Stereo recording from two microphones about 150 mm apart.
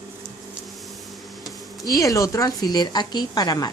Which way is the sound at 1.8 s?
25° left (ahead or behind).